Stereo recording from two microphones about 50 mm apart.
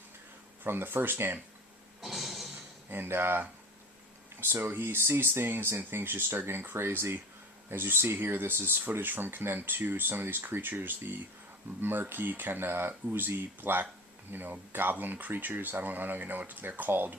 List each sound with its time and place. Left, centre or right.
0.6 s speech: right
2.0 s music: centre
2.9 s speech: right